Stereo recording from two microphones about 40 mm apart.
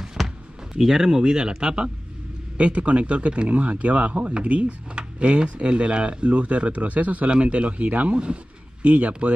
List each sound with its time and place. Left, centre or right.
0.2 s a sound: centre
0.7 s speech: centre
2.5 s speech: right